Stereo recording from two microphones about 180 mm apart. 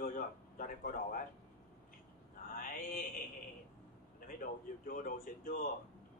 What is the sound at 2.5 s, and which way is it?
Mantra, 50° left (ahead or behind).